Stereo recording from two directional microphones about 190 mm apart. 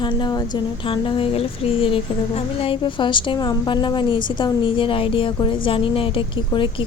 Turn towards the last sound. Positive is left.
turn(degrees=25)  # may be behind; listen again after turning